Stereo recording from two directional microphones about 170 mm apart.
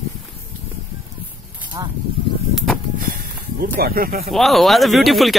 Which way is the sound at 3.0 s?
55° right (ahead or behind).